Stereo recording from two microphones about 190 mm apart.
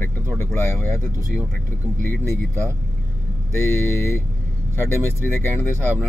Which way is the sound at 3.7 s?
15° left (ahead or behind).